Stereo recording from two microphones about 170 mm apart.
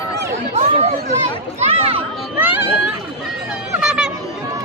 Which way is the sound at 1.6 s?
35° right (ahead or behind).